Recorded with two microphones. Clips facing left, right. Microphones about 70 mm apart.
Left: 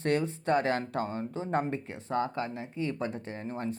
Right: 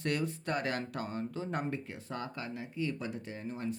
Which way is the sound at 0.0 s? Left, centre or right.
Left.